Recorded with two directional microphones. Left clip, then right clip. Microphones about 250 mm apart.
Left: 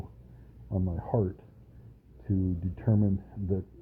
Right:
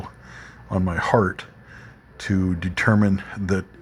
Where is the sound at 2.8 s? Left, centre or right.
Right.